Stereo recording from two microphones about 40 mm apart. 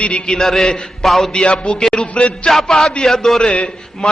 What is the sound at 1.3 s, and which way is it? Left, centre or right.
Music, left.